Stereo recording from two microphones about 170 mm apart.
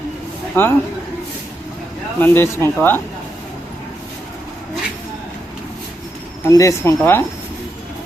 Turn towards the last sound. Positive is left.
turn(degrees=15)  # may be behind; listen again after turning